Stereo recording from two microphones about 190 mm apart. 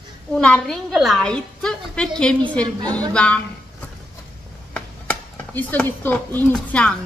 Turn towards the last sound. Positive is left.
turn(degrees=5)  # may be behind; listen again after turning